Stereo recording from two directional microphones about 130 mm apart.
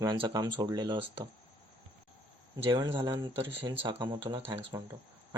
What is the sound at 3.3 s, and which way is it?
Speech, 40° right (ahead or behind).